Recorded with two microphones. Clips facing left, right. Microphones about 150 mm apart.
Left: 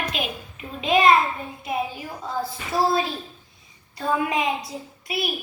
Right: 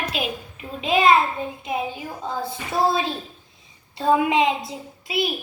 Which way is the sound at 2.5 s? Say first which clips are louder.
Right 1 dB; 25° right (ahead or behind).